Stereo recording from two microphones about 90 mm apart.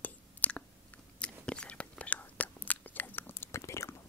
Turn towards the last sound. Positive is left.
turn(degrees=35)  # may be behind; listen again after turning